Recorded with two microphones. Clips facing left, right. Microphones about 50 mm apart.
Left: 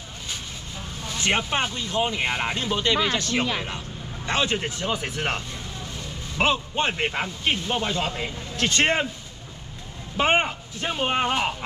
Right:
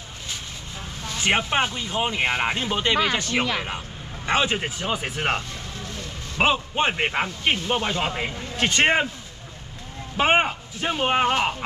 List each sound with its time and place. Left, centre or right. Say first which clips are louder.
1.0 s speech: right 2 dB; centre
10.1 s speech: right 2 dB; centre